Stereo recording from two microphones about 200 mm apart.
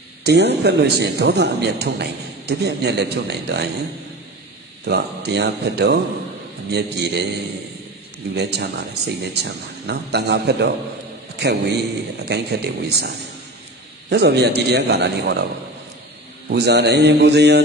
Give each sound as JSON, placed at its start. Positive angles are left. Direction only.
{"t": 0.2, "sound": "a man's voice", "side_deg": -55}
{"t": 4.8, "sound": "a man's voice", "side_deg": -55}
{"t": 8.4, "sound": "a man's voice", "side_deg": -55}
{"t": 16.4, "sound": "a man's voice", "side_deg": -55}